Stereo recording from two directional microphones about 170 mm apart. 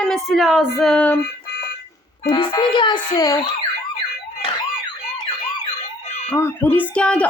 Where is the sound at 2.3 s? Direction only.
30° left (ahead or behind).